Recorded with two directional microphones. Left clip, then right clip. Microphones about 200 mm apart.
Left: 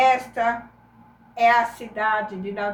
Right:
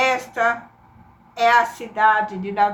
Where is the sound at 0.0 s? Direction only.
20° right (ahead or behind).